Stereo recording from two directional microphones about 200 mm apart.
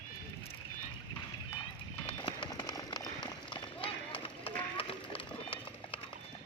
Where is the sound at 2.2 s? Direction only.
25° left (ahead or behind).